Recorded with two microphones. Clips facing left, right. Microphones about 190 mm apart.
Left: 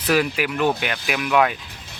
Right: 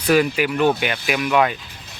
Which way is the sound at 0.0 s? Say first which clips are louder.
Right 3 dB; centre (ahead or behind).